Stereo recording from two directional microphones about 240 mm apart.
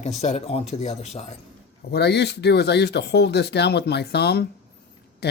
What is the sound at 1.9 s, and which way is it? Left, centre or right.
Speech, left.